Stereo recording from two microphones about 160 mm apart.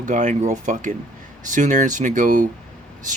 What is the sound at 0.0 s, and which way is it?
Speech, 50° right (ahead or behind).